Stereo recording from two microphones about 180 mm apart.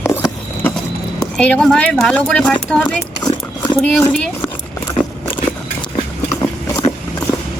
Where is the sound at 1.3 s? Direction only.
5° left (ahead or behind).